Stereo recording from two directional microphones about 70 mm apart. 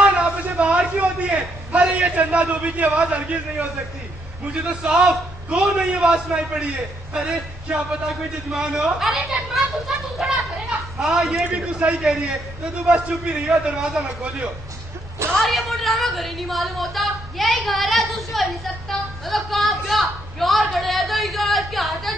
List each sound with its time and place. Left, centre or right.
0.0 s a sound: centre
0.9 s a man's voice: centre
4.6 s a man's voice: centre
8.5 s a woman's voice: centre
11.4 s a man's voice: centre
12.0 s a woman's voice: centre
15.3 s a woman's voice: centre